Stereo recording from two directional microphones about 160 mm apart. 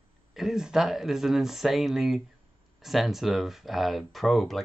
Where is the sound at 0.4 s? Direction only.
5° right (ahead or behind).